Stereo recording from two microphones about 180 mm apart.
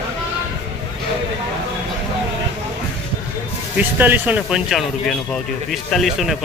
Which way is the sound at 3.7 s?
10° right (ahead or behind).